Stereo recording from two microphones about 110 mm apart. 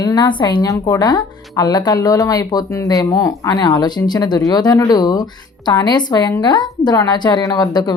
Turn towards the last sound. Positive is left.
turn(degrees=40)  # may be behind; listen again after turning